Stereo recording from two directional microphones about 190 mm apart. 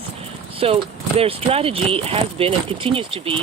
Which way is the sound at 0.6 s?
30° right (ahead or behind).